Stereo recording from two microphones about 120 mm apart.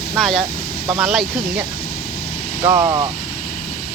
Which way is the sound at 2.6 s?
25° right (ahead or behind).